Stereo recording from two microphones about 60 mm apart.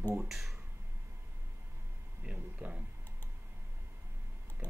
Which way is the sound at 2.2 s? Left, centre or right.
Centre.